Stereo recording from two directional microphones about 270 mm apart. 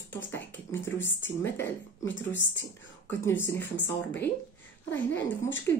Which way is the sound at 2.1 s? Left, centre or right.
Left.